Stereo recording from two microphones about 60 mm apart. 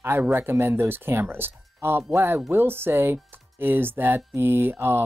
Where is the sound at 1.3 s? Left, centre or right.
Right.